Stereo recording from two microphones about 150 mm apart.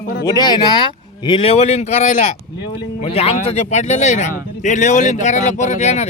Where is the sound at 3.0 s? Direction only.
40° left (ahead or behind).